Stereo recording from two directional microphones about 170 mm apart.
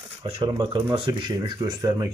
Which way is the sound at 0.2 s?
30° right (ahead or behind).